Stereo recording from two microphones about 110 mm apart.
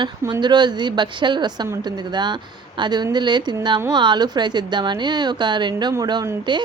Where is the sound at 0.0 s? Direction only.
40° right (ahead or behind).